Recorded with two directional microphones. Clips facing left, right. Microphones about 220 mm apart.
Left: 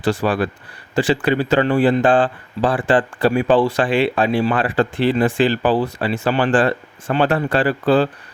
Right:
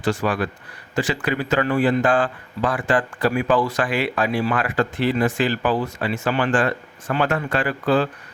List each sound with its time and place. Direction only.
0.0 s a man's voice: 35° left (ahead or behind)